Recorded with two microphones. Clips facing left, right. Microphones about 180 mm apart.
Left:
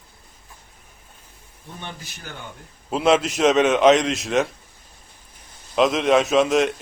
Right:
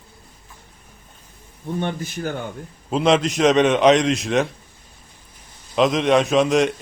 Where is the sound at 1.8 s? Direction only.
50° right (ahead or behind).